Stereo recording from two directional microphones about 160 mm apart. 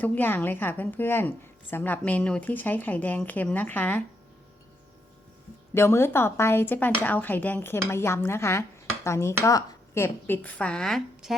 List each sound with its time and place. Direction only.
0.0 s speech: 10° left (ahead or behind)
5.7 s speech: 15° left (ahead or behind)